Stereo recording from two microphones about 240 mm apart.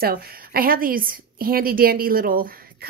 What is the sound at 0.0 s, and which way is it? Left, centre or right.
A woman's voice, right.